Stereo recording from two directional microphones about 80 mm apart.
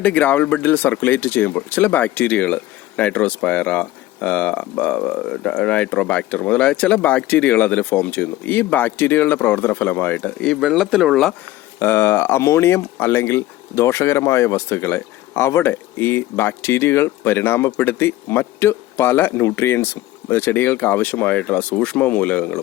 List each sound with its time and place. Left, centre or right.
0.0 s speech: centre
10.6 s speech: centre
11.8 s speech: left